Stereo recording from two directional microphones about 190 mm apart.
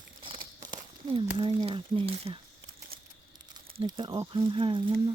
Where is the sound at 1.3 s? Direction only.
25° right (ahead or behind).